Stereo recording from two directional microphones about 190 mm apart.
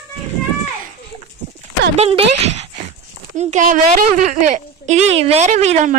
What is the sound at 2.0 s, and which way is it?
A woman's voice, 30° right (ahead or behind).